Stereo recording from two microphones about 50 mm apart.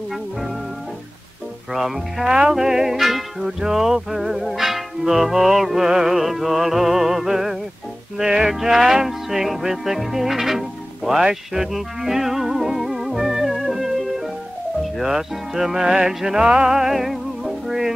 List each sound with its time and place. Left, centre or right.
1.7 s music: centre
2.2 s music: centre
16.4 s music: right
16.7 s music: centre